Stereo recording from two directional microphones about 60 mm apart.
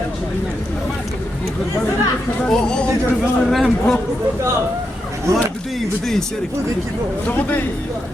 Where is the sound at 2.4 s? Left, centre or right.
Centre.